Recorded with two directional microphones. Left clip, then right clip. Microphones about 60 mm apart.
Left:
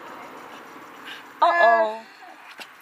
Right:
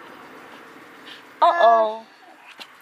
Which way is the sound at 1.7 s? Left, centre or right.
Centre.